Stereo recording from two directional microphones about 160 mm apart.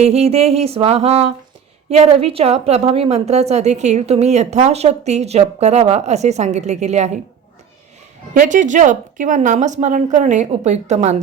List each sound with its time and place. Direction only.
0.0 s music: 40° right (ahead or behind)
1.9 s a woman's voice: 40° right (ahead or behind)
8.3 s a woman's voice: 55° right (ahead or behind)